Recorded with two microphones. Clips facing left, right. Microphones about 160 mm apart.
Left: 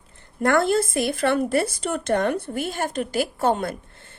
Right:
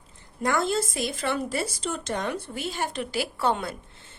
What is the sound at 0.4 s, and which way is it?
A woman's voice, 60° left (ahead or behind).